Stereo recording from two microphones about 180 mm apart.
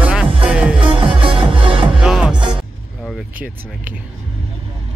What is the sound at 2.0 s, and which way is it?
Music, 5° right (ahead or behind).